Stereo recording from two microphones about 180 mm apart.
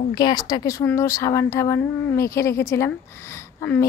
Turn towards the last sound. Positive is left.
turn(degrees=15)  # may be behind; listen again after turning